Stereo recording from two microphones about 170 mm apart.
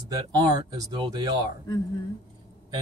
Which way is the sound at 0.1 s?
20° right (ahead or behind).